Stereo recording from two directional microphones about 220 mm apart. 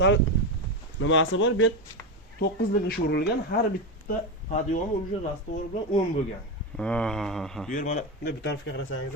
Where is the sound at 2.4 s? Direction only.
45° left (ahead or behind).